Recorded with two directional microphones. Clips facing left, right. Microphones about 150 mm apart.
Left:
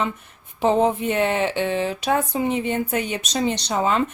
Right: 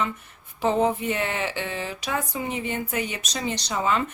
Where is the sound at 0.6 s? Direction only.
25° left (ahead or behind).